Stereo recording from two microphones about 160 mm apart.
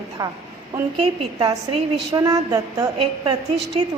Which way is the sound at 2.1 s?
25° right (ahead or behind).